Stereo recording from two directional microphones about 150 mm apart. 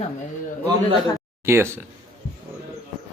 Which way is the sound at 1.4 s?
15° right (ahead or behind).